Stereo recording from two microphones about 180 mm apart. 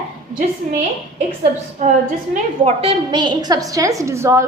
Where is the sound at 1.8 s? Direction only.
40° right (ahead or behind).